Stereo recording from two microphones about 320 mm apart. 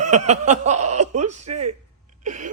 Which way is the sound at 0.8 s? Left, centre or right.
Right.